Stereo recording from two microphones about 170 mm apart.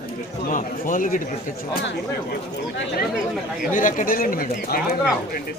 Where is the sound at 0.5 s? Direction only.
50° left (ahead or behind).